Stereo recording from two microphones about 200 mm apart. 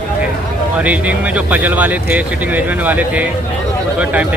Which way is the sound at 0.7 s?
5° right (ahead or behind).